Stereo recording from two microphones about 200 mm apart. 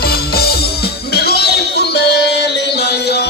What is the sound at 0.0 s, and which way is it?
Music, 50° left (ahead or behind).